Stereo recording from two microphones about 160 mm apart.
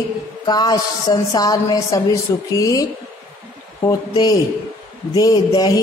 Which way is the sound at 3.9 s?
25° left (ahead or behind).